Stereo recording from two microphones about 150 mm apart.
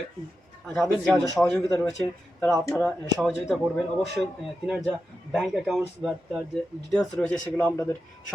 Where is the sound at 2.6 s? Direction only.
15° left (ahead or behind).